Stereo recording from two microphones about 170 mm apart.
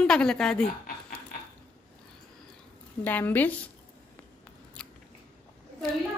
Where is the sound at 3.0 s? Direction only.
10° left (ahead or behind).